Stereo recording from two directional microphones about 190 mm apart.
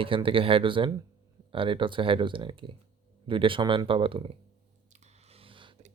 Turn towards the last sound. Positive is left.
turn(degrees=-25)  # may be behind; listen again after turning